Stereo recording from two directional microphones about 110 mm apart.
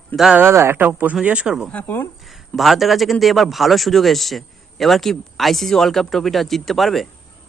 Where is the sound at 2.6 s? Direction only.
Centre (ahead or behind).